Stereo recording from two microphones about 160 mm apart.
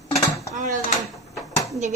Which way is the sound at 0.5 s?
55° right (ahead or behind).